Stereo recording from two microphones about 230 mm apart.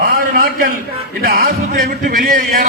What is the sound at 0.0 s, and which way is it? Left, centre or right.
A man's voice, right.